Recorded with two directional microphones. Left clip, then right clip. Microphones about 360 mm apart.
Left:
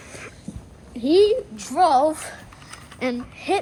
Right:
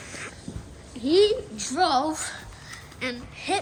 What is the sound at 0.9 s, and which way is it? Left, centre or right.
A woman's voice, centre.